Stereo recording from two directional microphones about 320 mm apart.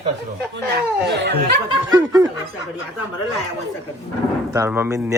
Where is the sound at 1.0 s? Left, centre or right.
Right.